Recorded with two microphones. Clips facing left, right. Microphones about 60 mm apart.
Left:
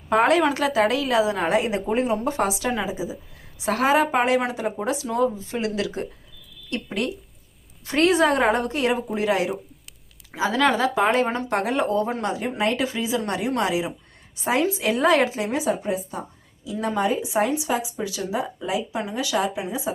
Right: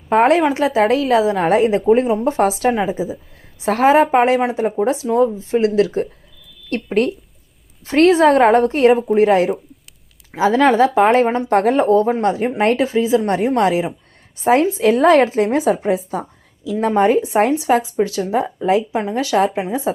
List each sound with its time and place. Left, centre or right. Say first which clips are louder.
0.1 s a woman's voice: right 5 dB; right
6.7 s speech: right 9 dB; right
7.9 s a woman's voice: right 7 dB; right
8.4 s a woman's voice: right 9 dB; right
15.6 s speech: right 7 dB; right
18.2 s a woman's voice: right 8 dB; right